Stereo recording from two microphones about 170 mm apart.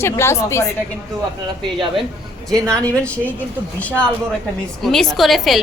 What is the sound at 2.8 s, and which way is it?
A woman's voice, 10° left (ahead or behind).